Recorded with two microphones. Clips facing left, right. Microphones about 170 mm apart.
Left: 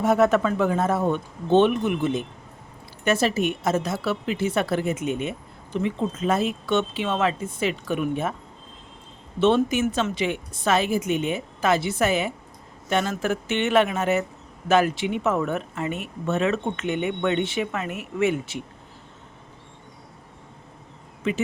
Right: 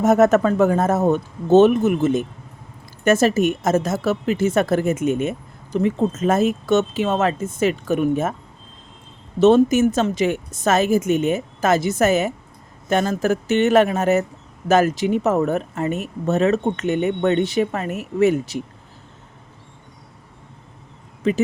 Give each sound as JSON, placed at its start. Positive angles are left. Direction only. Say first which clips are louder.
{"t": 0.0, "sound": "a woman's voice", "louder": "right 5 dB", "side_deg": -45}
{"t": 9.4, "sound": "a woman's voice", "louder": "right 6 dB", "side_deg": -40}
{"t": 21.2, "sound": "speech", "louder": "right 6 dB", "side_deg": -40}